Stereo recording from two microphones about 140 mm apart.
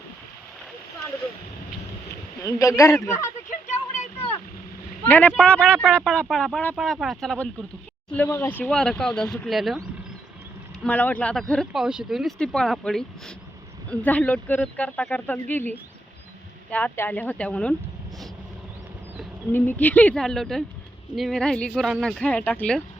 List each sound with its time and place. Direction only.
2.5 s speech: 20° left (ahead or behind)
3.5 s a sound: 55° left (ahead or behind)
5.0 s speech: 10° left (ahead or behind)
6.7 s speech: centre (ahead or behind)
10.8 s speech: 10° left (ahead or behind)
19.5 s speech: 15° left (ahead or behind)